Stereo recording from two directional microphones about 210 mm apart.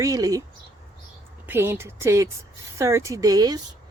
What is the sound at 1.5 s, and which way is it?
Speech, 10° right (ahead or behind).